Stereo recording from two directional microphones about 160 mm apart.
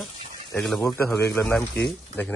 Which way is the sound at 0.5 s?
Centre (ahead or behind).